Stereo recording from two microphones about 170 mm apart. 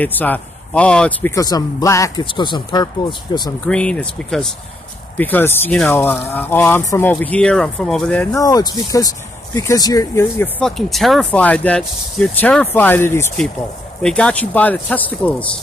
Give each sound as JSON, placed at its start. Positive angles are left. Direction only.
{"t": 0.0, "sound": "speech", "side_deg": 10}
{"t": 1.3, "sound": "speech", "side_deg": 20}
{"t": 3.6, "sound": "speech", "side_deg": 5}
{"t": 8.4, "sound": "speech", "side_deg": 20}
{"t": 10.6, "sound": "speech", "side_deg": 0}